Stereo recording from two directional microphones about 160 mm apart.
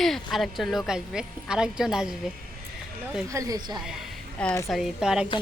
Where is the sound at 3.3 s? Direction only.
20° right (ahead or behind).